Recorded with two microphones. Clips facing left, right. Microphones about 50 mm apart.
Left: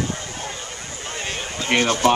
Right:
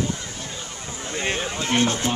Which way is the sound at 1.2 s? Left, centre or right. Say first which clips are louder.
Right 4 dB; right.